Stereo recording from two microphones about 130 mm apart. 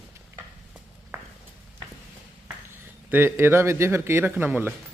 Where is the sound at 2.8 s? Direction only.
15° right (ahead or behind).